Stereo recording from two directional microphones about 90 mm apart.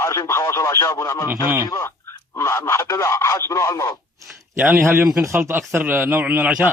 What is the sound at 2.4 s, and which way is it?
A man's voice, 30° left (ahead or behind).